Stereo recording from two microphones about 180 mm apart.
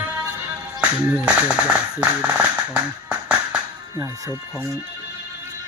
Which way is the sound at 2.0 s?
10° right (ahead or behind).